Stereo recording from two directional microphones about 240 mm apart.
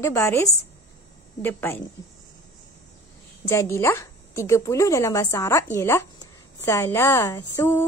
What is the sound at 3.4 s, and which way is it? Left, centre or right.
A woman's voice, centre.